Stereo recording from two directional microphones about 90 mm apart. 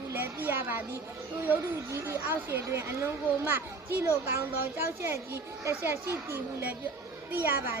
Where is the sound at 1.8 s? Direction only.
30° right (ahead or behind).